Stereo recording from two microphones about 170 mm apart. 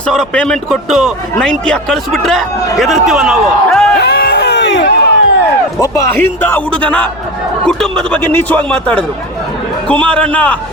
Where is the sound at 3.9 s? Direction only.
65° left (ahead or behind); by 4.9 s 90° left.